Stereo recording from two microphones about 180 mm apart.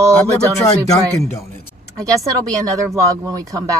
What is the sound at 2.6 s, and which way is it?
Speech, 15° right (ahead or behind).